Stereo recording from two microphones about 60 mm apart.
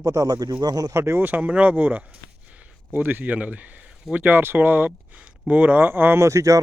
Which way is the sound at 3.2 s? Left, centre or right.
Right.